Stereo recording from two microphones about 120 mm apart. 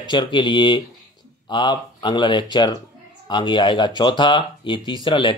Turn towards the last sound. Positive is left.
turn(degrees=40)  # may be behind; listen again after turning